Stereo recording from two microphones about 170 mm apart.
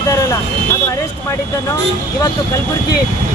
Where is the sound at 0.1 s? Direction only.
15° left (ahead or behind).